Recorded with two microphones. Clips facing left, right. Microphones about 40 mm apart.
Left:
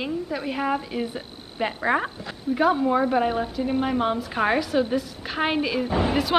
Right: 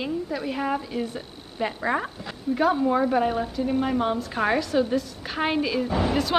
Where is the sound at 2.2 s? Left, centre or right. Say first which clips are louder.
Left 1 dB; centre.